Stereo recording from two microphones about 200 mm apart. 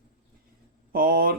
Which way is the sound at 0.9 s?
50° right (ahead or behind).